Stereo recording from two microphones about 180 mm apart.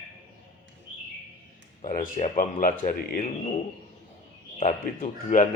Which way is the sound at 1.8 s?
50° left (ahead or behind).